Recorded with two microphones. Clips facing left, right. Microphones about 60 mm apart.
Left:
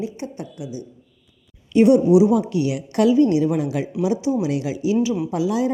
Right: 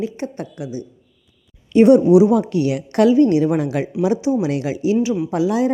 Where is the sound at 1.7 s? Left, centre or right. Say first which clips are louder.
Right 3 dB; right.